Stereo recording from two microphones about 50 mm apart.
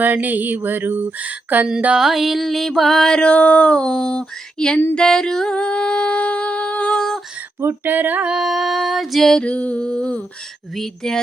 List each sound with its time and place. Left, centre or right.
0.0 s mantra: right
1.2 s mantra: right
2.0 s music: centre
3.2 s female singing: left
4.9 s a sound: centre
7.6 s mantra: right
8.4 s music: centre
9.4 s female singing: left
10.8 s speech: centre